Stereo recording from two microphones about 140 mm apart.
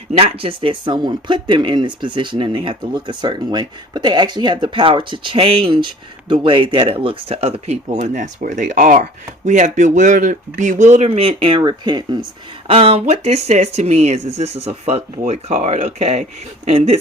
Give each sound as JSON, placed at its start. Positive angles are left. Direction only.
{"t": 0.1, "sound": "speech", "side_deg": -45}
{"t": 12.6, "sound": "speech", "side_deg": -45}